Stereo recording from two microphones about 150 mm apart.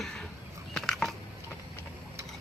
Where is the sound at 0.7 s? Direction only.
5° left (ahead or behind).